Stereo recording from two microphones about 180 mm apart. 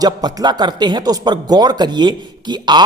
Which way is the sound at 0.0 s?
20° right (ahead or behind).